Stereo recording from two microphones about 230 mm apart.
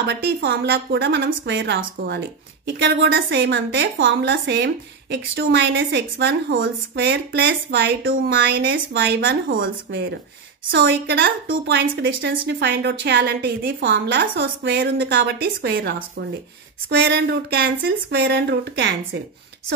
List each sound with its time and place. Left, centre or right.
0.0 s a woman's voice: right
10.7 s a woman's voice: right